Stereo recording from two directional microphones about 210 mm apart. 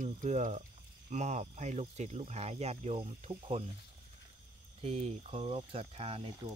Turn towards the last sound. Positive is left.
turn(degrees=-30)  # may be behind; listen again after turning